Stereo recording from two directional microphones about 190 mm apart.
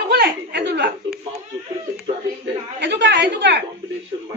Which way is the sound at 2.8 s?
65° right (ahead or behind).